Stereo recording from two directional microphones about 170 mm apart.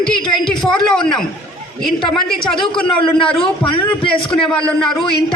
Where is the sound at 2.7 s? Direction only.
30° left (ahead or behind).